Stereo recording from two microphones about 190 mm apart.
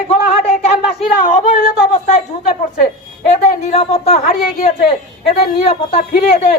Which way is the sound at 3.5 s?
35° left (ahead or behind).